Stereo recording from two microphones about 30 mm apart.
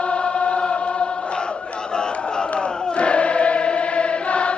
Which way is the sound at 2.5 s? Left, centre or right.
Left.